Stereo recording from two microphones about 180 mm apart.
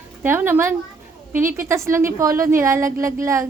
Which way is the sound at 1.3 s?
50° right (ahead or behind).